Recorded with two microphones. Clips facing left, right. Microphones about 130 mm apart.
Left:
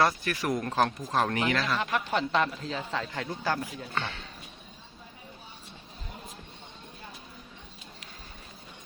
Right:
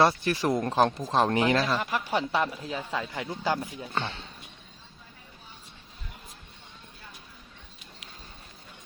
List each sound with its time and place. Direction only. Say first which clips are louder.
0.0 s speech: right 3 dB; 30° right (ahead or behind)
1.8 s a woman's voice: even; 10° right (ahead or behind)
3.9 s speech: right 2 dB; 30° right (ahead or behind)